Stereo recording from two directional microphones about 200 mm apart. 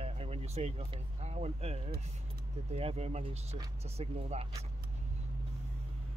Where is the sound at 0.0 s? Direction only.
30° right (ahead or behind).